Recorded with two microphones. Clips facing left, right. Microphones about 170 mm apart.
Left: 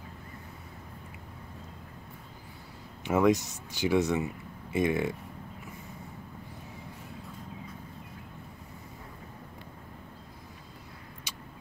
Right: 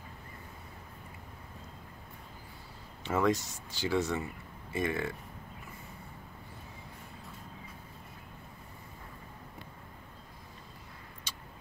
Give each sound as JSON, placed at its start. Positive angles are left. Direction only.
{"t": 3.0, "sound": "speech", "side_deg": 15}